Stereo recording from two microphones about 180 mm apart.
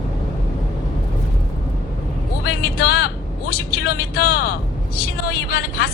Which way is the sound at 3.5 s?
55° left (ahead or behind).